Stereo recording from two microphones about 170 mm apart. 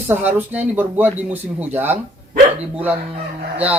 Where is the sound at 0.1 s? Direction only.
10° right (ahead or behind).